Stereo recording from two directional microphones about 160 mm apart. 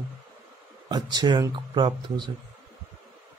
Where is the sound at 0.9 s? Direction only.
25° right (ahead or behind).